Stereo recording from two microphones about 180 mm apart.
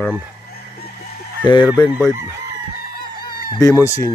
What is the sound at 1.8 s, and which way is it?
Speech, 20° left (ahead or behind).